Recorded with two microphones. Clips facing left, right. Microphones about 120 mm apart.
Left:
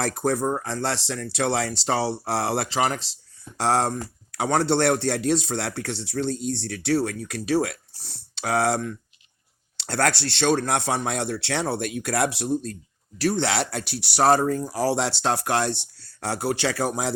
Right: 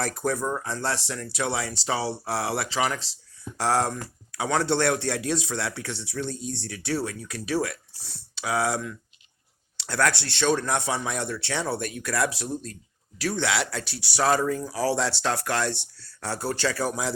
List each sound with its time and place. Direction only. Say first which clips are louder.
0.3 s speech: left 4 dB; 70° left (ahead or behind)
2.4 s speech: left 3 dB; 35° left (ahead or behind)
2.7 s speech: left 3 dB; 55° left (ahead or behind)
13.4 s speech: left 2 dB; 30° left (ahead or behind)
13.8 s speech: left 6 dB; 60° left (ahead or behind)